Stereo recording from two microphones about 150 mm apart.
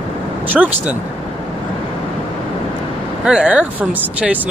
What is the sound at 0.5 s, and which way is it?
Speech, 10° right (ahead or behind).